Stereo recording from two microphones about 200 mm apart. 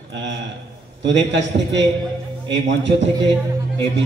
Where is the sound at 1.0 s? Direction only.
60° right (ahead or behind).